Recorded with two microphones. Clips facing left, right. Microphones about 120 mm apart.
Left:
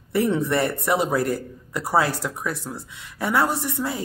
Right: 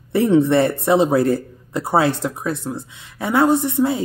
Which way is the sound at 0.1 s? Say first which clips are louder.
Right 7 dB; 25° right (ahead or behind).